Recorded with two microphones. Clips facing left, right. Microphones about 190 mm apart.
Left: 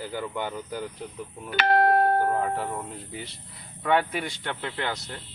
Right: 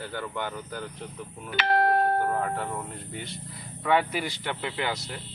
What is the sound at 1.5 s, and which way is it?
Doorbell, 45° left (ahead or behind).